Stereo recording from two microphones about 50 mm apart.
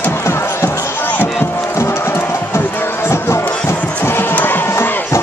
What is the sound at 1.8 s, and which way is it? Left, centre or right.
Music, left.